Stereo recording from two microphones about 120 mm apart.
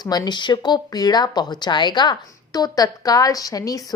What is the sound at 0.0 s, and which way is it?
Speech, 35° left (ahead or behind).